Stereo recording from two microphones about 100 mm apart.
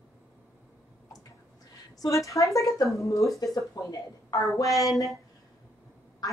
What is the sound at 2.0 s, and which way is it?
A woman's voice, 35° left (ahead or behind).